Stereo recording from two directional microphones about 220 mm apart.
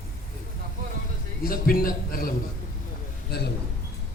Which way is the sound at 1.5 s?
40° left (ahead or behind).